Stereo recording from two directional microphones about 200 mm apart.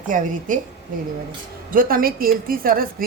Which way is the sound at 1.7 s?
45° right (ahead or behind).